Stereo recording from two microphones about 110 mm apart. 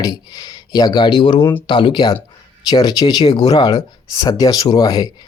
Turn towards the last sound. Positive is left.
turn(degrees=35)  # may be behind; listen again after turning